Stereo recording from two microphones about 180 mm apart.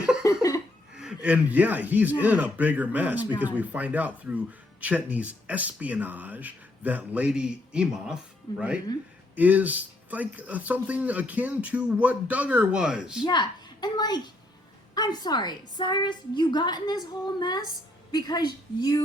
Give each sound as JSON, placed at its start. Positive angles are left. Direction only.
{"t": 0.2, "sound": "a sound", "side_deg": 20}
{"t": 0.9, "sound": "speech", "side_deg": -5}
{"t": 13.2, "sound": "a woman's voice", "side_deg": 25}